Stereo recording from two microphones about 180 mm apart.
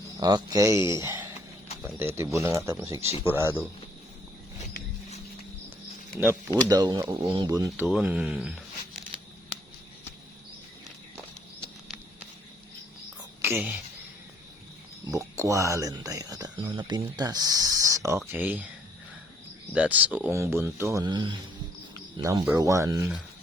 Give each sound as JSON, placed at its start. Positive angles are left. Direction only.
{"t": 0.2, "sound": "speech", "side_deg": -20}
{"t": 6.7, "sound": "speech", "side_deg": -25}
{"t": 7.9, "sound": "speech", "side_deg": -5}
{"t": 13.4, "sound": "speech", "side_deg": -10}
{"t": 15.4, "sound": "speech", "side_deg": -15}
{"t": 19.7, "sound": "speech", "side_deg": -10}